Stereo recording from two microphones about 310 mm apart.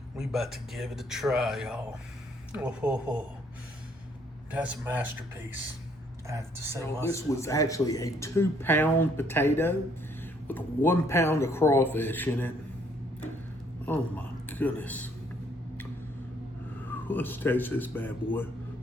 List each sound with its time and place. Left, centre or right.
0.2 s speech: centre
4.5 s speech: centre
6.2 s speech: centre
7.0 s speech: centre
13.8 s speech: centre
16.9 s speech: centre